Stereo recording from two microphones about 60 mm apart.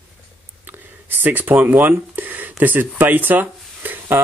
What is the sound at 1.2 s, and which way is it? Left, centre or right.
Speech, right.